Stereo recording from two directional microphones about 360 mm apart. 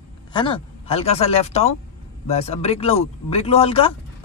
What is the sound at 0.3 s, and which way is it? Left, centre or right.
Speech, centre.